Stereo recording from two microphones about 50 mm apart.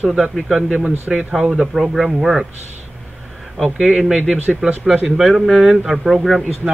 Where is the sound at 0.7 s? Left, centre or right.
Right.